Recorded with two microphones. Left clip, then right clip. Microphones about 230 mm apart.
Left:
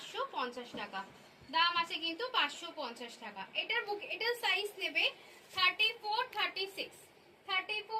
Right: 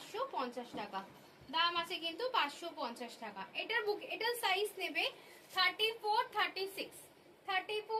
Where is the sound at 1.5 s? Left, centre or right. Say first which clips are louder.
Left 3 dB; centre.